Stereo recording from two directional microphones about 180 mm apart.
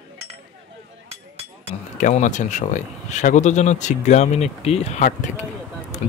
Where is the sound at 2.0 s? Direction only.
40° left (ahead or behind).